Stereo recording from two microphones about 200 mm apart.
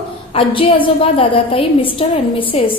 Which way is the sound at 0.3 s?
25° left (ahead or behind).